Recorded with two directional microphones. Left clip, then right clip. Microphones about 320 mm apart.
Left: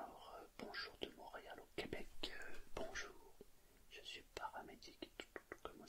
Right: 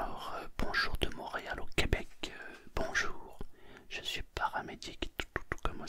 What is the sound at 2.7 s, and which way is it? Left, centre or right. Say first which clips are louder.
Whispering: right 16 dB; right.